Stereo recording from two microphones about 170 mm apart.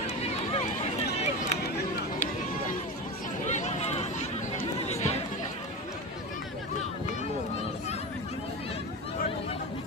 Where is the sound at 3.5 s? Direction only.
40° left (ahead or behind).